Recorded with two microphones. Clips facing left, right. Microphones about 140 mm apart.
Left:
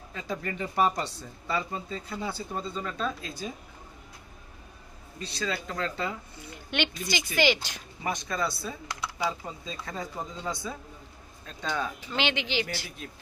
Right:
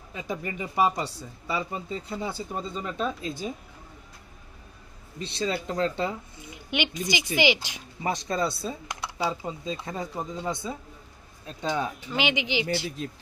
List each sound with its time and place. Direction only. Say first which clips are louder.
0.1 s speech: right 1 dB; 15° right (ahead or behind)
5.2 s speech: right 4 dB; 25° right (ahead or behind)
6.5 s speech: right 1 dB; 10° right (ahead or behind)
8.0 s speech: right 3 dB; 30° right (ahead or behind)
12.1 s speech: right 2 dB; 10° right (ahead or behind)
12.6 s speech: right 9 dB; 25° right (ahead or behind)